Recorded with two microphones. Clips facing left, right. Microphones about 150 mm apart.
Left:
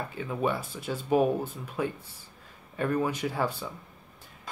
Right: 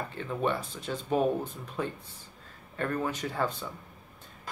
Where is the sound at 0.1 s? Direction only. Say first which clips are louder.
Left 1 dB; 10° left (ahead or behind).